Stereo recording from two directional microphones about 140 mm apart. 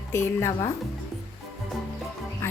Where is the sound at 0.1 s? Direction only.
20° left (ahead or behind).